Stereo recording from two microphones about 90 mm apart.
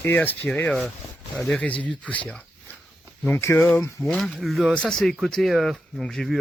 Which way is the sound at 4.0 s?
5° left (ahead or behind).